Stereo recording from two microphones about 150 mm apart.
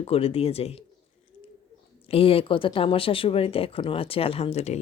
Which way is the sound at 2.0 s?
40° left (ahead or behind).